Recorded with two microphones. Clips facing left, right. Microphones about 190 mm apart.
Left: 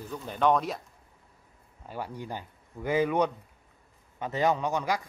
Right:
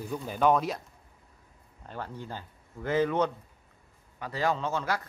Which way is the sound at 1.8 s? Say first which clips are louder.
Left 2 dB; 10° left (ahead or behind).